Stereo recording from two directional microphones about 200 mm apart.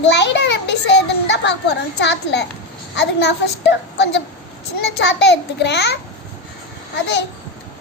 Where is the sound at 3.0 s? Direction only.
60° left (ahead or behind).